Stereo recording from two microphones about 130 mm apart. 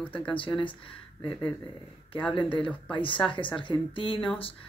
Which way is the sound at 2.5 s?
40° left (ahead or behind).